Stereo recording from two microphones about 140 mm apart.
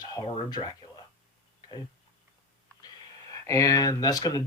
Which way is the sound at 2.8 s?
25° left (ahead or behind).